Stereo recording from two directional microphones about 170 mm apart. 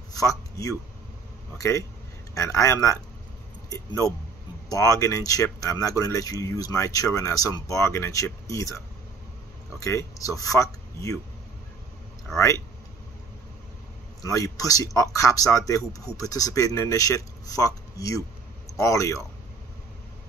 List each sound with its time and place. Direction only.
0.1 s a sound: 20° left (ahead or behind)
1.6 s a man's voice: 20° left (ahead or behind)
14.2 s a man's voice: 20° left (ahead or behind)